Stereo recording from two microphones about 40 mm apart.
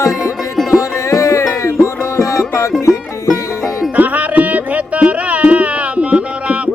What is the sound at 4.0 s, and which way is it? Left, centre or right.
Music, right.